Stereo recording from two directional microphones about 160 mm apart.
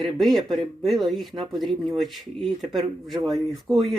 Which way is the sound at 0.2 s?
Centre (ahead or behind).